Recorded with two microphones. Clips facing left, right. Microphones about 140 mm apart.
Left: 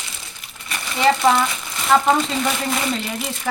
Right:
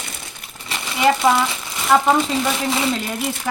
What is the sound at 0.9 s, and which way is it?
Speech, 5° right (ahead or behind).